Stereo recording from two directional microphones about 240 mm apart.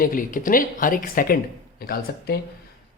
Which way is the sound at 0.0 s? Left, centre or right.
Left.